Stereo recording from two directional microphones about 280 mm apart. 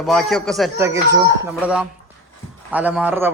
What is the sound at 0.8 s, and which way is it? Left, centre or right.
A man's voice, centre.